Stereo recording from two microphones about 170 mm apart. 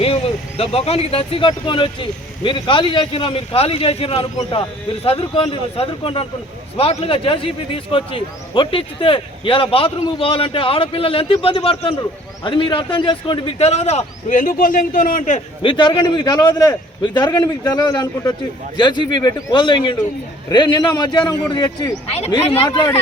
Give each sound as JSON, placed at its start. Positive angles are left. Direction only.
{"t": 0.0, "sound": "speech", "side_deg": 35}
{"t": 15.6, "sound": "a man's voice", "side_deg": 25}